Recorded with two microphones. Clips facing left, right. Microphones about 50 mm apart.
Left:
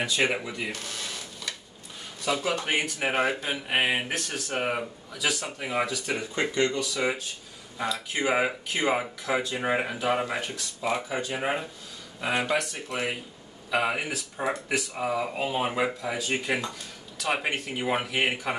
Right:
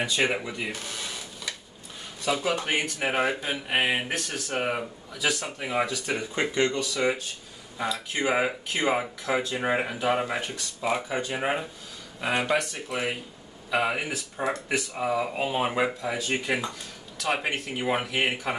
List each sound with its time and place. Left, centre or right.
0.1 s speech: centre
6.3 s speech: centre
6.7 s speech: centre